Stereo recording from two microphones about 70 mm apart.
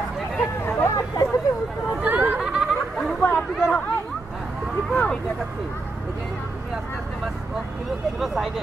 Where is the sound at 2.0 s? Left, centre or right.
Right.